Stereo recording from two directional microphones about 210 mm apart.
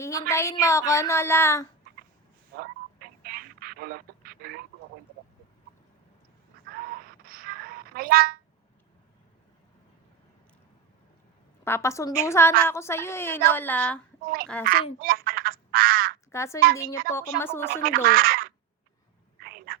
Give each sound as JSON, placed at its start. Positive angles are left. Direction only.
{"t": 0.0, "sound": "a woman's voice", "side_deg": 15}
{"t": 2.6, "sound": "telephone", "side_deg": -45}
{"t": 6.7, "sound": "a sound", "side_deg": -45}
{"t": 11.6, "sound": "a woman's voice", "side_deg": 10}
{"t": 14.9, "sound": "speech", "side_deg": -45}
{"t": 16.3, "sound": "a woman's voice", "side_deg": 15}
{"t": 17.7, "sound": "speech", "side_deg": -45}
{"t": 19.4, "sound": "a sound", "side_deg": -45}